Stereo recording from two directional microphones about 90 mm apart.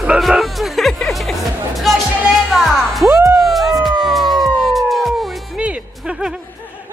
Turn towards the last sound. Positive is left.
turn(degrees=-10)  # may be behind; listen again after turning